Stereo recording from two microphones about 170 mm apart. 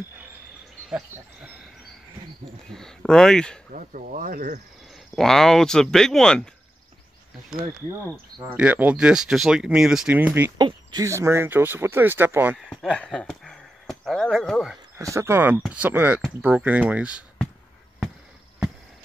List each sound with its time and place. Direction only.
0.8 s sheep: 5° right (ahead or behind)
2.7 s speech: 5° left (ahead or behind)
3.7 s speech: 50° right (ahead or behind)
4.9 s speech: centre (ahead or behind)
8.5 s speech: 10° right (ahead or behind)
10.6 s speech: 25° right (ahead or behind)
12.5 s speech: 5° left (ahead or behind)
15.0 s speech: 20° right (ahead or behind)